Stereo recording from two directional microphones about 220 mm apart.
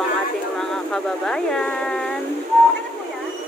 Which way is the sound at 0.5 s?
5° left (ahead or behind).